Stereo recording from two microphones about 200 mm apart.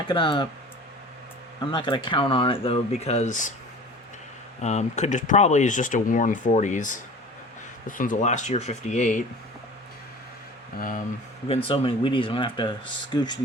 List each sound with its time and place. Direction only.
0.1 s speech: 25° left (ahead or behind)
1.7 s speech: 25° left (ahead or behind); by 3.5 s 40° left (ahead or behind)
4.6 s speech: 35° left (ahead or behind)
10.8 s speech: 45° left (ahead or behind)
11.4 s speech: 30° left (ahead or behind)